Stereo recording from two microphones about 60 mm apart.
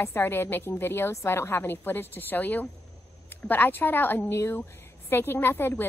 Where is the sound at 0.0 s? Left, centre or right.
Left.